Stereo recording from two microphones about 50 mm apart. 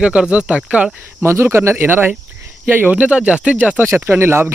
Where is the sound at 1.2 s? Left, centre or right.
Right.